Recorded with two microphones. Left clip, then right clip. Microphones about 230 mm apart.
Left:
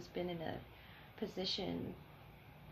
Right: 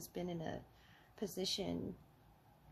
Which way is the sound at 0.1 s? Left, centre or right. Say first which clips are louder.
Left 2 dB; right.